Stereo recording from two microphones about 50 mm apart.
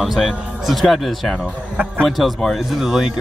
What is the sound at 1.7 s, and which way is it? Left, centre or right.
Speech, right.